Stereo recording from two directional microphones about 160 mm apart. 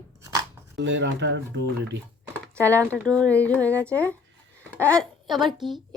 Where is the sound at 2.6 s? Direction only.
10° left (ahead or behind).